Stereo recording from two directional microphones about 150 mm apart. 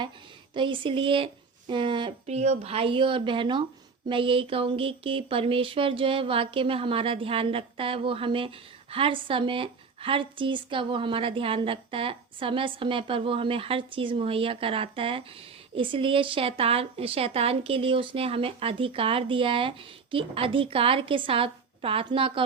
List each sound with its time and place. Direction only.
0.5 s speech: 35° right (ahead or behind)
2.2 s speech: 45° right (ahead or behind)